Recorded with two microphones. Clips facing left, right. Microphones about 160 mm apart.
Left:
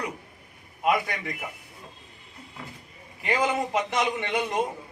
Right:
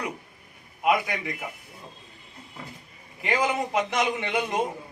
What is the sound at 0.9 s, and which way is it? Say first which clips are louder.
Speech: even; centre (ahead or behind).